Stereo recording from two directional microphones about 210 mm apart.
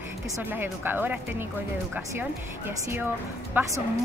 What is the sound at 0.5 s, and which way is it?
Speech, 10° right (ahead or behind).